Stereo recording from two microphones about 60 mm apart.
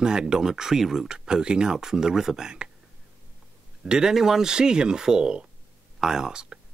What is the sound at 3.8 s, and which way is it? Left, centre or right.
Speech, centre.